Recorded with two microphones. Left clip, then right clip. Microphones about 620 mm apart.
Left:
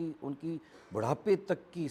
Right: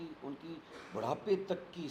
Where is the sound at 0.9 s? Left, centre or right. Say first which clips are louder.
Left 4 dB; left.